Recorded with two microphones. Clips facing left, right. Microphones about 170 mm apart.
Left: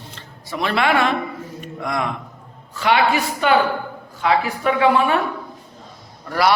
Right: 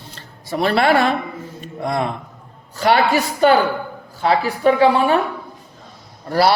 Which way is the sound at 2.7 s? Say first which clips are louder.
Right 2 dB; 40° right (ahead or behind).